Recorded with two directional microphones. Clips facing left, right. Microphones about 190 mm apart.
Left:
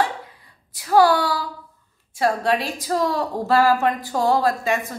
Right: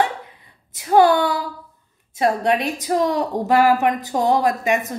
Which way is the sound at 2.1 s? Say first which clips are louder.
Right 2 dB; 20° right (ahead or behind).